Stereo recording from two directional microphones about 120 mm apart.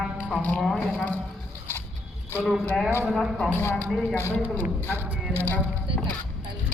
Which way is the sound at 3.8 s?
Centre (ahead or behind).